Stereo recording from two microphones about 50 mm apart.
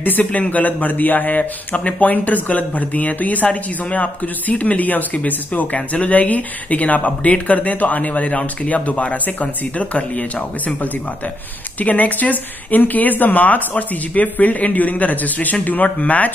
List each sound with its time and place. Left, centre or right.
0.0 s speech: left
11.8 s speech: left